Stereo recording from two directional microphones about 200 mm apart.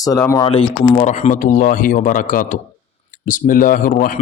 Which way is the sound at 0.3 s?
20° left (ahead or behind).